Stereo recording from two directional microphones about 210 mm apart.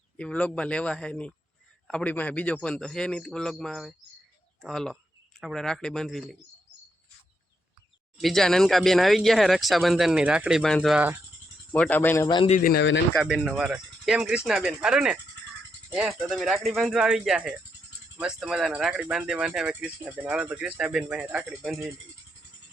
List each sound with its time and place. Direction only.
0.2 s speech: 5° left (ahead or behind)
8.2 s speech: centre (ahead or behind)
11.7 s speech: 10° left (ahead or behind)
12.4 s a man's voice: 35° left (ahead or behind)
13.1 s speech: centre (ahead or behind)
16.3 s speech: centre (ahead or behind)